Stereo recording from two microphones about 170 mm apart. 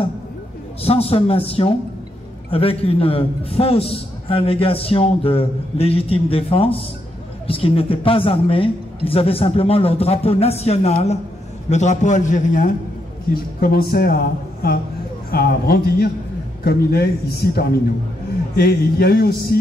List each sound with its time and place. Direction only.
0.8 s a man's voice: 35° left (ahead or behind)
13.3 s a man's voice: 60° left (ahead or behind)